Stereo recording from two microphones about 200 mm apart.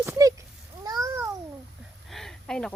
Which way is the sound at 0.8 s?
15° right (ahead or behind).